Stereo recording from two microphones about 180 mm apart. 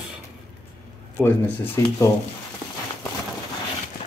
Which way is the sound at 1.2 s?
10° left (ahead or behind).